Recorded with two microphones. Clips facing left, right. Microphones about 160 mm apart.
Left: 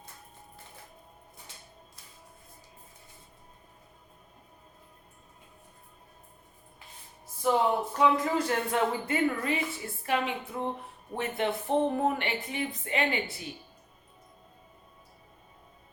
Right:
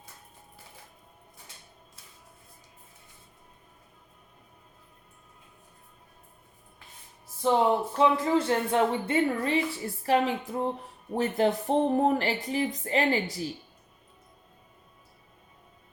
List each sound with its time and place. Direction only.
7.9 s a woman's voice: 30° right (ahead or behind)